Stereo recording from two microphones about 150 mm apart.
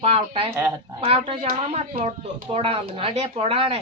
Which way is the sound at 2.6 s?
40° right (ahead or behind).